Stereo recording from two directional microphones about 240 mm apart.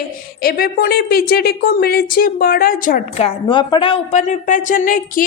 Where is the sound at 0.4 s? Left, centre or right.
Left.